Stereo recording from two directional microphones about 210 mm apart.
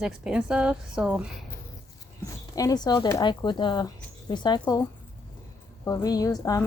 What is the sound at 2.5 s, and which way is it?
Speech, 15° left (ahead or behind).